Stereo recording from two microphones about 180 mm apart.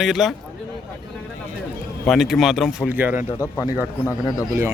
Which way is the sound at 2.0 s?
Centre (ahead or behind).